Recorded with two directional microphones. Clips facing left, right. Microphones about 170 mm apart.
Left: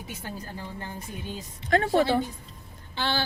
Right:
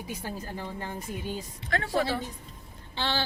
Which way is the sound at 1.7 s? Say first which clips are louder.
Left 6 dB; 25° left (ahead or behind).